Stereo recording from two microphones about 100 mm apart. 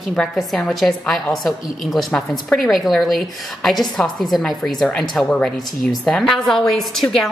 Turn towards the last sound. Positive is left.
turn(degrees=0)  # may be behind; listen again after turning